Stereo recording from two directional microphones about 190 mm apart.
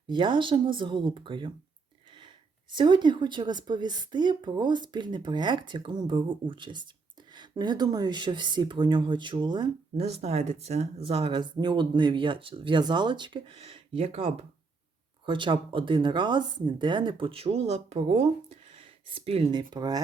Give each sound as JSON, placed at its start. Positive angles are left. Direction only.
{"t": 0.1, "sound": "speech", "side_deg": -25}
{"t": 2.7, "sound": "speech", "side_deg": -25}